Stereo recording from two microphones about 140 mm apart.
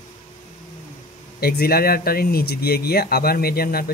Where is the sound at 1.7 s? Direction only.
90° left.